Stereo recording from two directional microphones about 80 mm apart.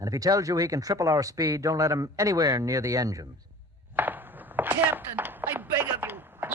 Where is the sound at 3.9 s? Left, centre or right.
Right.